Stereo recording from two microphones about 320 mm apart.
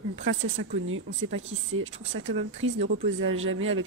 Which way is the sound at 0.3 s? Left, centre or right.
Right.